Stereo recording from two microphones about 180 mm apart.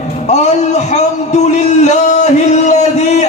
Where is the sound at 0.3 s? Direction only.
40° left (ahead or behind).